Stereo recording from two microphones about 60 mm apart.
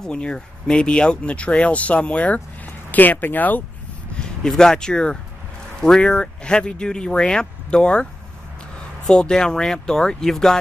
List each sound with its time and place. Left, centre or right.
0.0 s speech: centre
4.1 s speech: centre